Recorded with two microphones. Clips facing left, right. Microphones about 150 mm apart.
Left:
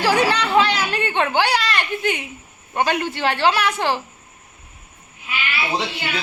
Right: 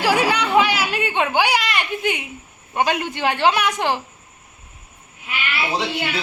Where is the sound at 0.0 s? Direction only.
10° right (ahead or behind).